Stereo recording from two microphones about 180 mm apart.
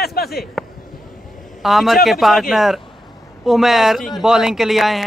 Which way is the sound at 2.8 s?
25° left (ahead or behind).